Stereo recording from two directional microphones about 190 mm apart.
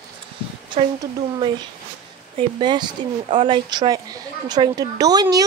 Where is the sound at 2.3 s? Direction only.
25° right (ahead or behind).